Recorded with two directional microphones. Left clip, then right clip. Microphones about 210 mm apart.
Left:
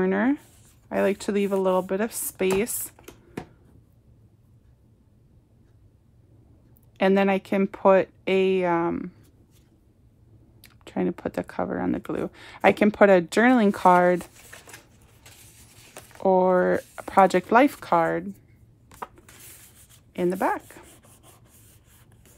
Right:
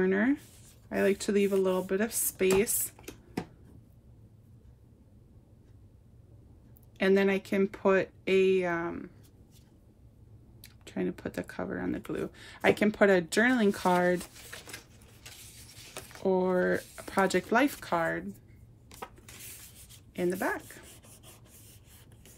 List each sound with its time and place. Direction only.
0.0 s a sound: 25° left (ahead or behind)
0.8 s speech: 25° left (ahead or behind)
7.0 s speech: 30° left (ahead or behind)
10.6 s speech: 30° left (ahead or behind)
14.3 s speech: 5° left (ahead or behind)
15.7 s a sound: 5° left (ahead or behind)
16.2 s speech: 35° left (ahead or behind)
18.9 s a sound: 15° left (ahead or behind)
20.1 s speech: 25° left (ahead or behind)
20.6 s chopping: 15° left (ahead or behind)